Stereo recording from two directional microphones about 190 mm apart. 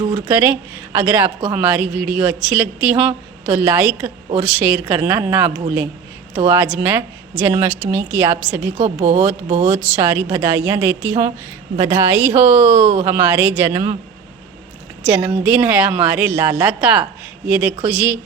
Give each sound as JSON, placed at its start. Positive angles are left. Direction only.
{"t": 0.3, "sound": "speech", "side_deg": -10}
{"t": 8.8, "sound": "speech", "side_deg": -35}
{"t": 9.6, "sound": "speech", "side_deg": -10}
{"t": 15.0, "sound": "speech", "side_deg": -5}